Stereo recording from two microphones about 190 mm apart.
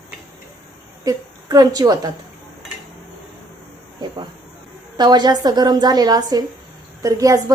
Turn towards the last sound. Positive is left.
turn(degrees=-20)  # may be behind; listen again after turning